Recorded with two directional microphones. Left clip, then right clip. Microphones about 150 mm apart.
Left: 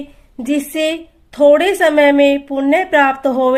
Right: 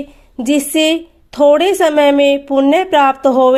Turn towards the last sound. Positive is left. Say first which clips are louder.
# right 4 dB
turn(degrees=-40)  # may be behind; listen again after turning